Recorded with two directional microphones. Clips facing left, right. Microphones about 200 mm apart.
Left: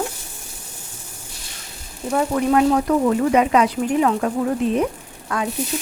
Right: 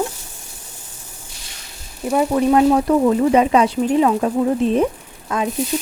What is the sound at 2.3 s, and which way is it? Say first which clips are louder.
Speech: right 3 dB; 25° right (ahead or behind).